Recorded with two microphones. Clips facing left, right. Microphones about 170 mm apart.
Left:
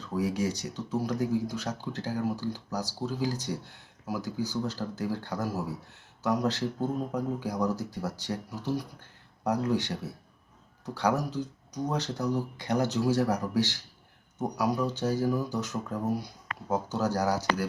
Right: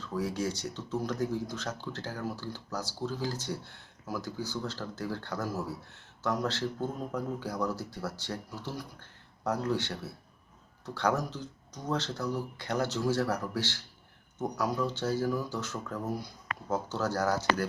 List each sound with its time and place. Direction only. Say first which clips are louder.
0.1 s speech: left 3 dB; 15° left (ahead or behind)